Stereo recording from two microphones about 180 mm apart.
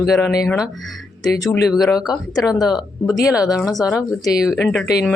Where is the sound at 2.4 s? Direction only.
20° left (ahead or behind).